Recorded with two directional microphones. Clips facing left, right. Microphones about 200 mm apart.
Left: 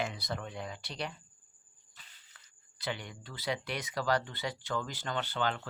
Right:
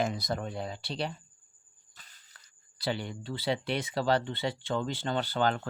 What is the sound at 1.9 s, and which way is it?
Speech, 40° right (ahead or behind).